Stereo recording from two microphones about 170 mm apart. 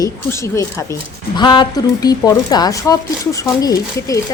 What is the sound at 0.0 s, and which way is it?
Speech, 15° left (ahead or behind).